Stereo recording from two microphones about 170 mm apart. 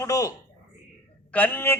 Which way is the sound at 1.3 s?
10° left (ahead or behind).